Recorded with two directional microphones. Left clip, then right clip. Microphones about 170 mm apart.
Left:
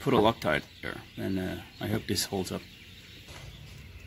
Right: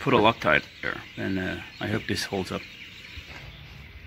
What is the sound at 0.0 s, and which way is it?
Speech, centre (ahead or behind).